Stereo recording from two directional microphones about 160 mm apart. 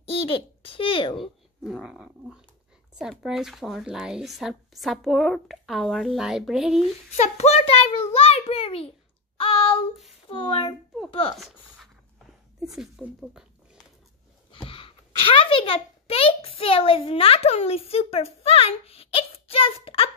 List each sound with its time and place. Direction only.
0.0 s a child's voice: 35° left (ahead or behind)
1.1 s speech: centre (ahead or behind)
7.2 s a child's voice: 40° left (ahead or behind)
9.4 s child singing: 35° left (ahead or behind)
10.3 s speech: 35° left (ahead or behind)
11.3 s a sound: centre (ahead or behind)
12.6 s speech: centre (ahead or behind)
14.5 s a child's voice: 35° left (ahead or behind)